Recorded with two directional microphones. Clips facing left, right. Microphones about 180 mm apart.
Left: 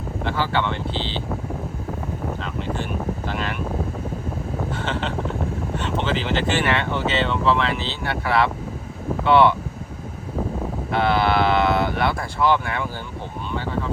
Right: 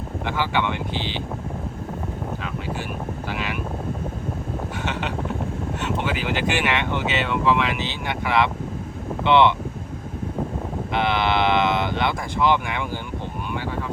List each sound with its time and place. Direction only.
0.3 s speech: 15° right (ahead or behind)
2.4 s speech: 10° right (ahead or behind)
4.8 s speech: 15° right (ahead or behind)
10.9 s speech: 20° right (ahead or behind)